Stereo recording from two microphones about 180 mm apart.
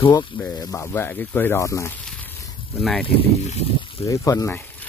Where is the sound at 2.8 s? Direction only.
Centre (ahead or behind).